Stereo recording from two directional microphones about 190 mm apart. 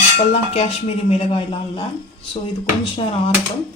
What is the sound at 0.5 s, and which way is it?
Speech, 35° left (ahead or behind).